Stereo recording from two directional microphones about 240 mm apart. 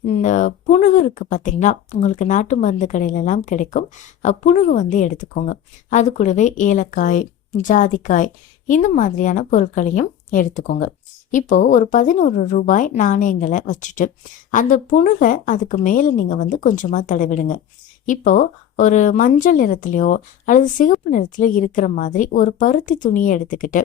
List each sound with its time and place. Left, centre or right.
0.1 s speech: left